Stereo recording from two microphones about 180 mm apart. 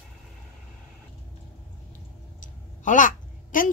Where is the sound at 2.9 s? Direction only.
45° left (ahead or behind).